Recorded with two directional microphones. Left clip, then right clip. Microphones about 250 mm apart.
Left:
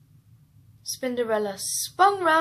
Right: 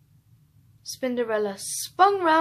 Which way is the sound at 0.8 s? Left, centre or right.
Right.